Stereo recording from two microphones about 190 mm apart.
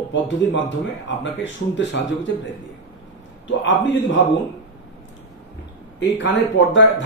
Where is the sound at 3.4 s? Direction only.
75° left (ahead or behind).